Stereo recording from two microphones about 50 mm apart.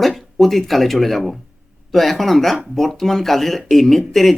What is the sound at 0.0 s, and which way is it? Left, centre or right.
Speech, centre.